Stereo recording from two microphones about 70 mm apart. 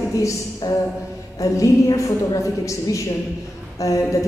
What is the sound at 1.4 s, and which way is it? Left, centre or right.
A man's voice, left.